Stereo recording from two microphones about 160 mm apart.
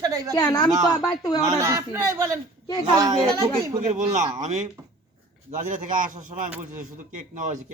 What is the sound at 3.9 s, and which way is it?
Speech, 50° right (ahead or behind).